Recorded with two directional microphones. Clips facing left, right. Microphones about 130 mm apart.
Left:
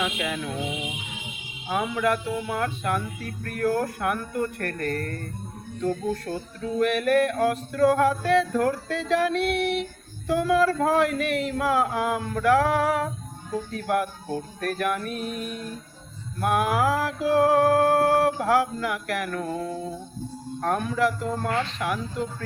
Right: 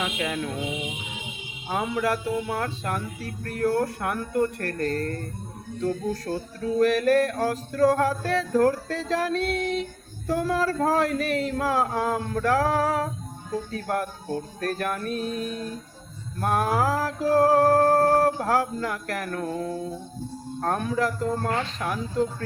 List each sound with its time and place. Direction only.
0.0 s music: 40° right (ahead or behind)
1.7 s speech: 35° right (ahead or behind)
6.2 s speech: 35° right (ahead or behind)
16.4 s speech: 35° right (ahead or behind)
20.6 s speech: 35° right (ahead or behind)